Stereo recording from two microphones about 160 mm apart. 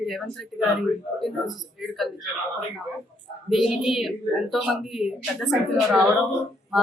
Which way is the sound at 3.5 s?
Centre (ahead or behind).